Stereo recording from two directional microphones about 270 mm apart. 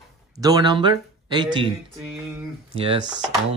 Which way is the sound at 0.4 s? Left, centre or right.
Centre.